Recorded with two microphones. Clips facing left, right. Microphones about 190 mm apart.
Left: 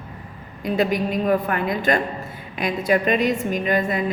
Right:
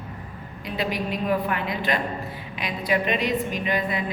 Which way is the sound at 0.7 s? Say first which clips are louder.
Left 6 dB; 45° left (ahead or behind).